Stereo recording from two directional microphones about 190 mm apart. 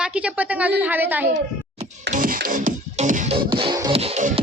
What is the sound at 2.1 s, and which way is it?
Music, 45° right (ahead or behind).